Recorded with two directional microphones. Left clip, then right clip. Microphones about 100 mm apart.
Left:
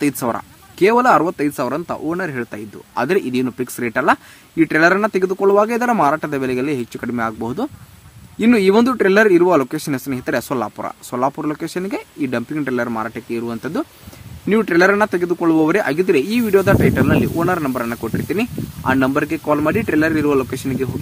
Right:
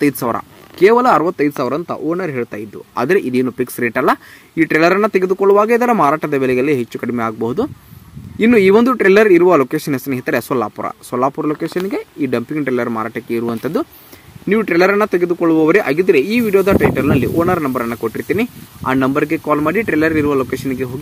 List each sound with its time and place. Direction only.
0.0 s speech: 20° right (ahead or behind)
8.5 s speech: 10° right (ahead or behind)
8.8 s speech: 20° right (ahead or behind)
13.5 s speech: 45° right (ahead or behind)
14.6 s speech: 15° right (ahead or behind)